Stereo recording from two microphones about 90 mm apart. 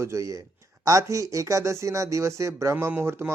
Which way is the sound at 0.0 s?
35° right (ahead or behind).